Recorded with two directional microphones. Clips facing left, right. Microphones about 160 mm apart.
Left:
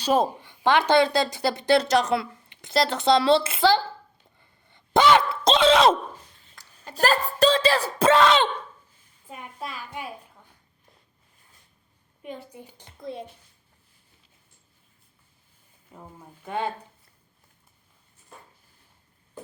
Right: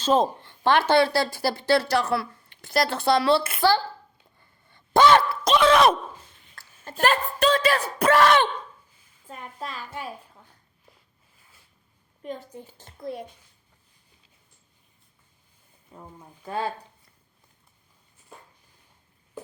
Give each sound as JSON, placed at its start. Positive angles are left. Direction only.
{"t": 0.0, "sound": "a woman's voice", "side_deg": 10}
{"t": 4.7, "sound": "a sound", "side_deg": 20}
{"t": 5.6, "sound": "speech", "side_deg": 25}
{"t": 6.6, "sound": "a sound", "side_deg": 15}
{"t": 6.9, "sound": "a woman's voice", "side_deg": 35}
{"t": 9.2, "sound": "a child's voice", "side_deg": 10}
{"t": 12.2, "sound": "a child's voice", "side_deg": 10}
{"t": 16.5, "sound": "a woman's voice", "side_deg": 20}